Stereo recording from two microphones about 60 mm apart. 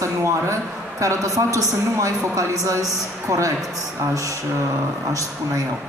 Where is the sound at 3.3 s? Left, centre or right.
Right.